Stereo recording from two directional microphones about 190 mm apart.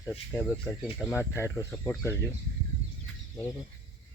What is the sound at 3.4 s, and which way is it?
Speech, 15° left (ahead or behind).